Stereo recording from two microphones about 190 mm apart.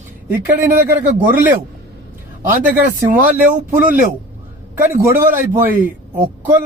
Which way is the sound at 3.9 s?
45° right (ahead or behind).